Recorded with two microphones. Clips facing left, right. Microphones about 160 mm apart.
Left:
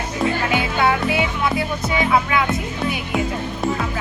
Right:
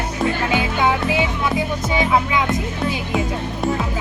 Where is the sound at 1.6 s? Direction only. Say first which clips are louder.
Right 1 dB; 15° right (ahead or behind).